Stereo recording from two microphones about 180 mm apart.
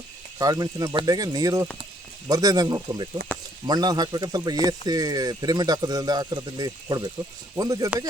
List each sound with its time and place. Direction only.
0.3 s speech: 20° right (ahead or behind)